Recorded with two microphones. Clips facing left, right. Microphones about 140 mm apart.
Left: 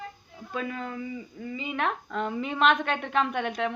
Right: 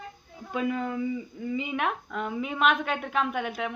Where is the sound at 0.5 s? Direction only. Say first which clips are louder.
Right 5 dB; 15° right (ahead or behind).